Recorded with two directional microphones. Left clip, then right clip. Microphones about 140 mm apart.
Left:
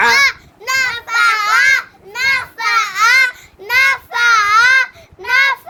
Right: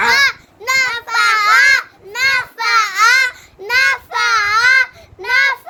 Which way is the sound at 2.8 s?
90° right.